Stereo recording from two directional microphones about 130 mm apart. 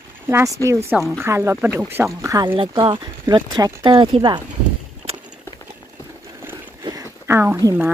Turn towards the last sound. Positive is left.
turn(degrees=-15)  # may be behind; listen again after turning